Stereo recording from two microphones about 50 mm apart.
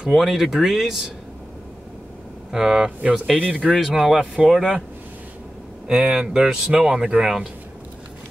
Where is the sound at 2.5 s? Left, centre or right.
Centre.